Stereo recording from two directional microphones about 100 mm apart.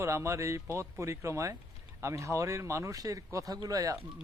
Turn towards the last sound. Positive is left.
turn(degrees=-35)  # may be behind; listen again after turning